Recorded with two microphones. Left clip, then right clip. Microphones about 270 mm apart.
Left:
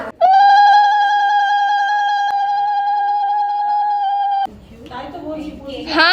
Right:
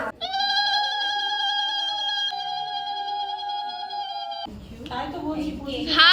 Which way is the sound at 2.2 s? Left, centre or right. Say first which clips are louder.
Left 11 dB; centre.